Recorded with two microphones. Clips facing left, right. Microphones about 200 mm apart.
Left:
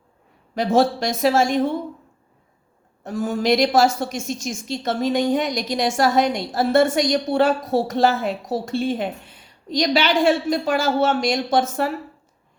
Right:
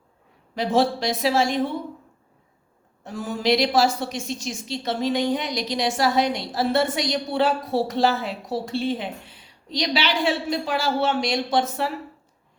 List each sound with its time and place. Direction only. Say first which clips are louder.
0.5 s a woman's voice: left 3 dB; 45° left (ahead or behind)
3.0 s a woman's voice: left 4 dB; 45° left (ahead or behind)